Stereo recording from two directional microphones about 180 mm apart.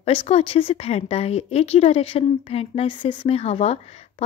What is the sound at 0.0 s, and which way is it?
A woman's voice, 35° left (ahead or behind).